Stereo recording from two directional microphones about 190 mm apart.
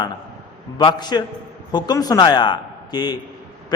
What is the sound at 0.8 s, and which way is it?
A man's voice, 25° left (ahead or behind).